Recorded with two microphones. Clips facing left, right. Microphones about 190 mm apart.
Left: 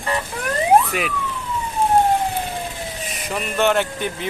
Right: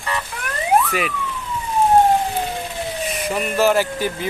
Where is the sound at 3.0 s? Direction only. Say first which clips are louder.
Right 6 dB; 45° right (ahead or behind).